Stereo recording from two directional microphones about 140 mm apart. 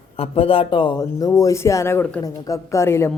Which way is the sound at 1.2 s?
25° left (ahead or behind).